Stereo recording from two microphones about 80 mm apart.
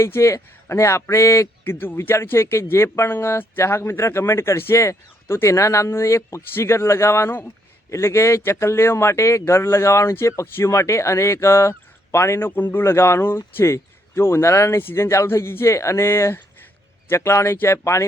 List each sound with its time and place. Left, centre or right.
0.0 s a man's voice: left